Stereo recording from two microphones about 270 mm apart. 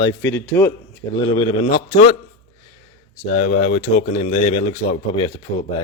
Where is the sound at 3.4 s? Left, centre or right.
Left.